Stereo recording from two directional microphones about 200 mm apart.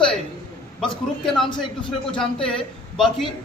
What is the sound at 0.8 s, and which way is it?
Speech, centre (ahead or behind).